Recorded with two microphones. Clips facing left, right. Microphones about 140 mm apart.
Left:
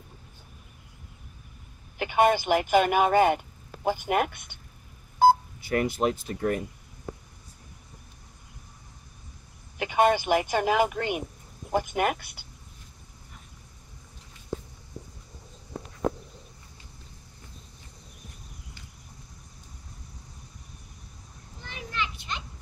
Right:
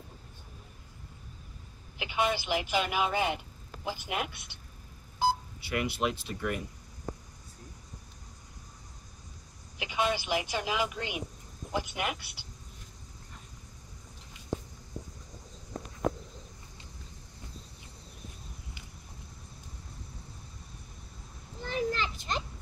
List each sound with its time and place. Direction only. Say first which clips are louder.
2.0 s speech: left 8 dB; 50° left (ahead or behind)
9.8 s speech: left 8 dB; 50° left (ahead or behind)
21.6 s children playing: right 4 dB; 40° right (ahead or behind)